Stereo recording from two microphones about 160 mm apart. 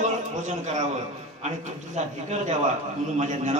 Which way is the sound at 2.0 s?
45° right (ahead or behind).